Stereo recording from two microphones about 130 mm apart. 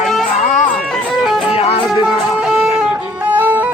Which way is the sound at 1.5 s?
45° left (ahead or behind).